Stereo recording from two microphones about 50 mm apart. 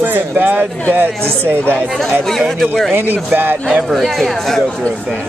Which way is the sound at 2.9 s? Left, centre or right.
Right.